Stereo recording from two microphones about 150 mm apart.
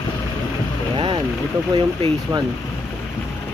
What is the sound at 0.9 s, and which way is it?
Vehicle, 35° right (ahead or behind).